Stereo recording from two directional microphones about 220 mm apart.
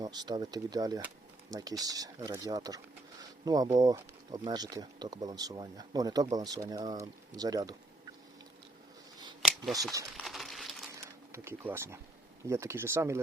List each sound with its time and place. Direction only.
0.0 s speech: 20° right (ahead or behind)
9.9 s crumpling: 15° right (ahead or behind)
10.2 s a sound: centre (ahead or behind)
11.0 s speech: 10° right (ahead or behind)